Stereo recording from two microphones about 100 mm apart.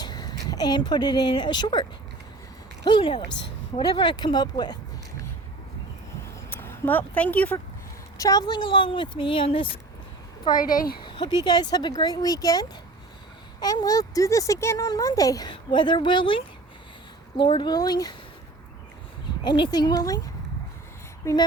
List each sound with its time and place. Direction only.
0.0 s speech: 45° left (ahead or behind)
6.2 s a sound: 25° left (ahead or behind)
8.2 s speech: 40° left (ahead or behind); by 9.7 s 60° left (ahead or behind)
10.5 s speech: 50° left (ahead or behind)
15.4 s speech: 50° left (ahead or behind)
19.5 s speech: 50° left (ahead or behind); by 21.4 s 30° left (ahead or behind)